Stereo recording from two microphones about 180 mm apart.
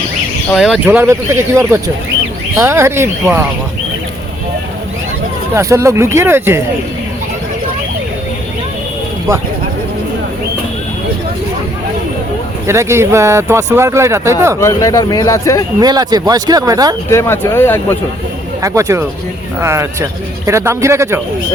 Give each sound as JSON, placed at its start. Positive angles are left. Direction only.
{"t": 0.5, "sound": "speech", "side_deg": 0}
{"t": 0.9, "sound": "speech", "side_deg": -15}
{"t": 5.5, "sound": "speech", "side_deg": -15}
{"t": 12.6, "sound": "speech", "side_deg": -15}
{"t": 14.6, "sound": "speech", "side_deg": 20}
{"t": 15.8, "sound": "speech", "side_deg": -20}
{"t": 17.1, "sound": "speech", "side_deg": 15}
{"t": 18.6, "sound": "speech", "side_deg": -15}